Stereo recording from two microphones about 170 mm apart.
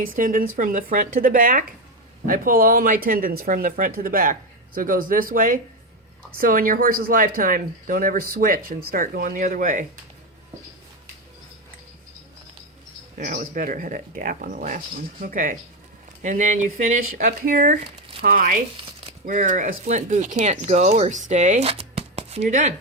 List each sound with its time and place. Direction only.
0.0 s speech: 55° right (ahead or behind)
13.1 s speech: 50° right (ahead or behind)